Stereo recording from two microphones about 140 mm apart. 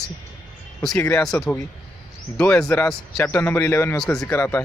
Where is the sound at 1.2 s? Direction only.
5° left (ahead or behind).